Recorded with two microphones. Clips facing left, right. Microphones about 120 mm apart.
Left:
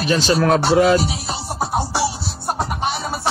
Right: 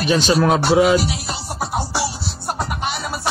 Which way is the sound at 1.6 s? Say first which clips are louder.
Left 2 dB; 30° left (ahead or behind).